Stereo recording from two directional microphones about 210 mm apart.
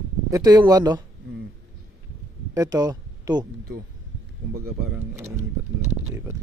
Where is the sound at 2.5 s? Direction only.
15° right (ahead or behind).